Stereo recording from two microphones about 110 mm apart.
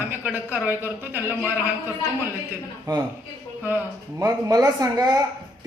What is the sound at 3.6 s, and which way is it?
Speech, 20° right (ahead or behind).